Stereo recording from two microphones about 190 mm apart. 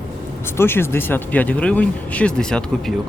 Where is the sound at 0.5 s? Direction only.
10° left (ahead or behind).